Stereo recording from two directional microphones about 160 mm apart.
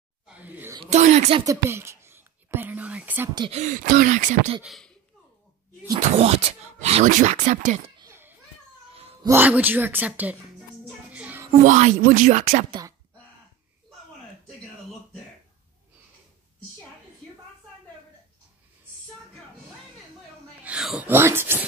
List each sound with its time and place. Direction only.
0.3 s a sound: 10° right (ahead or behind)
0.8 s speech: 45° right (ahead or behind)
1.4 s whispering: 20° right (ahead or behind)
3.3 s speech: 35° right (ahead or behind)
3.6 s speech: 60° right (ahead or behind)
4.6 s speech: centre (ahead or behind)
5.9 s speech: 40° right (ahead or behind)
8.0 s children playing: 15° right (ahead or behind)
9.2 s a woman's voice: 15° right (ahead or behind)
11.1 s music: 10° right (ahead or behind)
11.6 s speech: 50° right (ahead or behind)
20.6 s a sound: 5° right (ahead or behind)